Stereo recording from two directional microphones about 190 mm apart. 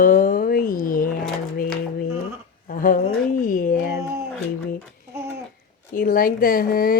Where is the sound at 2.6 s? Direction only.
45° left (ahead or behind).